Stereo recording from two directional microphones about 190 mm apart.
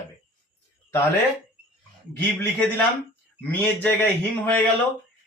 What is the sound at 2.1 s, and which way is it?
A man's voice, 10° left (ahead or behind).